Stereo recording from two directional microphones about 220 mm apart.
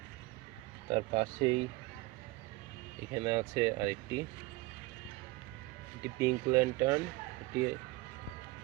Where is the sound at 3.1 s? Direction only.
15° right (ahead or behind).